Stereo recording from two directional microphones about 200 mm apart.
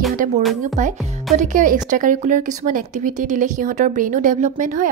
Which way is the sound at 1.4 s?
40° right (ahead or behind).